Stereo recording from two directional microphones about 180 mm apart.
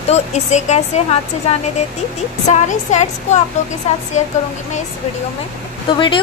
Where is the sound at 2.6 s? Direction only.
40° left (ahead or behind).